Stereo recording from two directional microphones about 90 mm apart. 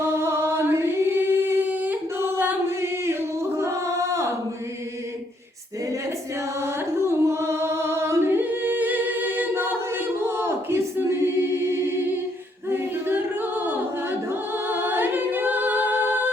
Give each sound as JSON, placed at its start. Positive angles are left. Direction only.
{"t": 0.0, "sound": "singing", "side_deg": -30}
{"t": 6.6, "sound": "singing", "side_deg": -30}
{"t": 12.6, "sound": "a capella", "side_deg": -25}